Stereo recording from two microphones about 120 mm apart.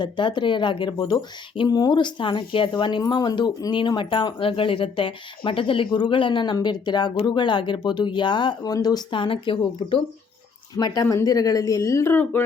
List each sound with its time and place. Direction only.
0.0 s speech: 40° left (ahead or behind)
10.8 s speech: 35° left (ahead or behind); by 12.5 s 20° left (ahead or behind)